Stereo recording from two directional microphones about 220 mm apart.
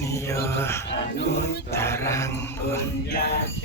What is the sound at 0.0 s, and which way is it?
Mantra, 15° left (ahead or behind).